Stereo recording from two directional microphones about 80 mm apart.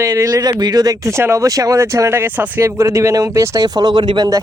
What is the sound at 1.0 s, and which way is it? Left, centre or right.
Speech, right.